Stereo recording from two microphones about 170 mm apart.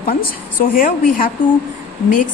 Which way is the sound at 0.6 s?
55° left (ahead or behind).